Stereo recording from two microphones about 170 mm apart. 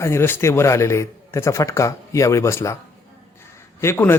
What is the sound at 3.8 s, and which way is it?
Speech, 15° left (ahead or behind).